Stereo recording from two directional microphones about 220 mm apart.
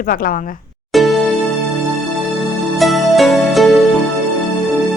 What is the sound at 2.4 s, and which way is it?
Music, centre (ahead or behind).